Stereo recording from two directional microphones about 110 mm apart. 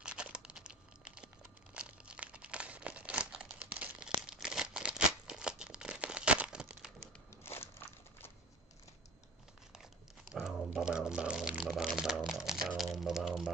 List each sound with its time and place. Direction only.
0.0 s crumpling: 10° right (ahead or behind)
7.4 s crushing: 20° left (ahead or behind)
10.3 s speech: 5° right (ahead or behind)